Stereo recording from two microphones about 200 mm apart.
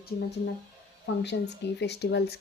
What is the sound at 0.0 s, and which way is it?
Speech, 55° left (ahead or behind).